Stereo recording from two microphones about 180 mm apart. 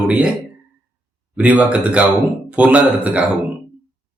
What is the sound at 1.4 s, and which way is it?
Speech, 5° right (ahead or behind).